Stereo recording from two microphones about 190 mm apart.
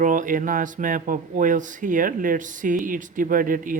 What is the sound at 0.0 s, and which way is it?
Speech, 45° right (ahead or behind).